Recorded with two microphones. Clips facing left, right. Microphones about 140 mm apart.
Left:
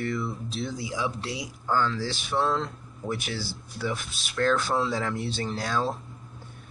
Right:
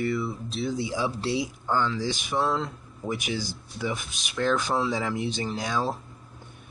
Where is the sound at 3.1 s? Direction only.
15° right (ahead or behind).